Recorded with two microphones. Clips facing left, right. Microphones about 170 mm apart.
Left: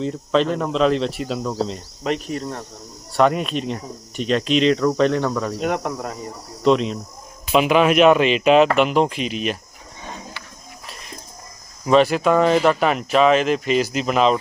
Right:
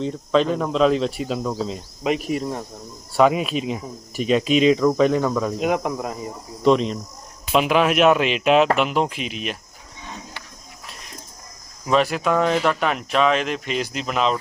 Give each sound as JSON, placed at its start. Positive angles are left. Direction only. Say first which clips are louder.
{"t": 0.0, "sound": "speech", "louder": "even", "side_deg": 0}
{"t": 11.9, "sound": "speech", "louder": "left 4 dB", "side_deg": 0}